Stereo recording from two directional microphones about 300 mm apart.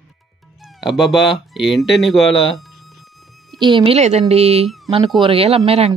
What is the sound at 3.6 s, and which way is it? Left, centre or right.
Speech, centre.